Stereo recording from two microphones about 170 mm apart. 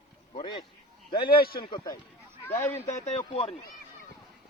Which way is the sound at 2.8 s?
40° left (ahead or behind).